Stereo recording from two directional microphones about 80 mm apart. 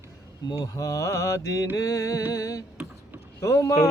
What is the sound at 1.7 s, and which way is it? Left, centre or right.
Speech, left.